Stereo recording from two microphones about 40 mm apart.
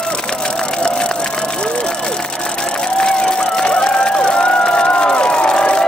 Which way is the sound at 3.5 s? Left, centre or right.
Left.